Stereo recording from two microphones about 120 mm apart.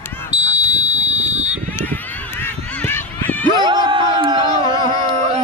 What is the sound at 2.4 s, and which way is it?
Honk, 15° left (ahead or behind).